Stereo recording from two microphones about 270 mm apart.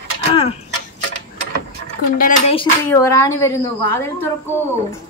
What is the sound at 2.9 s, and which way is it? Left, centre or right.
Speech, centre.